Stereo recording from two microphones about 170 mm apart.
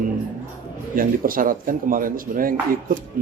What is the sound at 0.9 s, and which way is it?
A man's voice, 55° right (ahead or behind).